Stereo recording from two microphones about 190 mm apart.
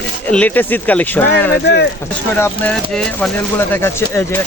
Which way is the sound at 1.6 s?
60° left (ahead or behind).